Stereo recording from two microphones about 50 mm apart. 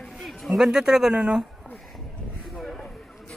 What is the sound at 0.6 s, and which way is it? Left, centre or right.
Speech, centre.